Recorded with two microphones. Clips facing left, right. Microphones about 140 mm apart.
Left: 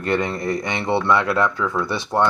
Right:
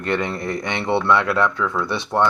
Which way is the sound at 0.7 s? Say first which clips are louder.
Right 1 dB; centre (ahead or behind).